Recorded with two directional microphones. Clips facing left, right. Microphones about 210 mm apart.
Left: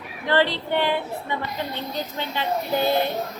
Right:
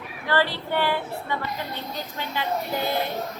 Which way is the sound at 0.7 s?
20° left (ahead or behind).